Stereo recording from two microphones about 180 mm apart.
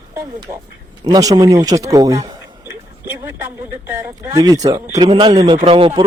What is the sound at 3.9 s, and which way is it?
Speech, 15° right (ahead or behind).